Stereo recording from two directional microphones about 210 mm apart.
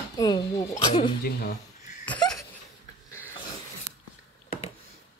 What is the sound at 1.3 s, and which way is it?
Speech, 50° left (ahead or behind).